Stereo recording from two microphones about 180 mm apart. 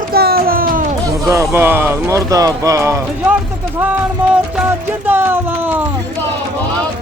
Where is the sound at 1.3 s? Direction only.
15° right (ahead or behind).